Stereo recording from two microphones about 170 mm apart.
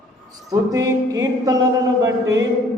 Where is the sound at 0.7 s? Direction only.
20° right (ahead or behind).